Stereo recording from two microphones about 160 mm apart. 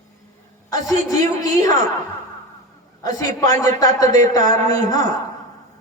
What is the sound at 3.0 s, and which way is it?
Speech, 20° left (ahead or behind).